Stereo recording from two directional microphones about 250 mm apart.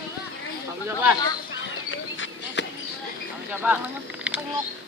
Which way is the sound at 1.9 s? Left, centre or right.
Left.